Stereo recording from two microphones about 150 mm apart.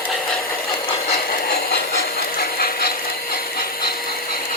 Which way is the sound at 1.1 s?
85° left.